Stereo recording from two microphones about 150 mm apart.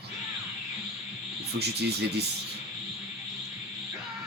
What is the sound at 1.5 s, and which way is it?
Speech, 90° right.